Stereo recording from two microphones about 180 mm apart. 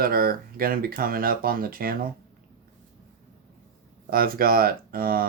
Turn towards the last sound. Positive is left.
turn(degrees=-55)  # may be behind; listen again after turning